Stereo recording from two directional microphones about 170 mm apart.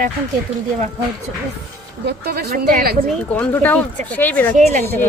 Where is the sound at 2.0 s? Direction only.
70° right (ahead or behind).